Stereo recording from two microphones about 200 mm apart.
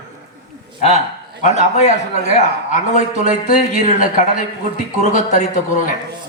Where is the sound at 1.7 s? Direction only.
35° left (ahead or behind).